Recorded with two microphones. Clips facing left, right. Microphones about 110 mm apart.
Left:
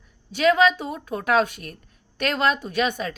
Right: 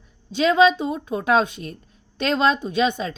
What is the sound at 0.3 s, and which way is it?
A woman's voice, 20° right (ahead or behind).